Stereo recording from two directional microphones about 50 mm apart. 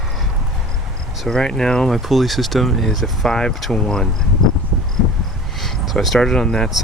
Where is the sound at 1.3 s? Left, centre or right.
Centre.